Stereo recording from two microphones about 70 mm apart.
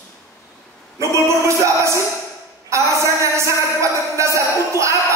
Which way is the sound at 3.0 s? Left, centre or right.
Right.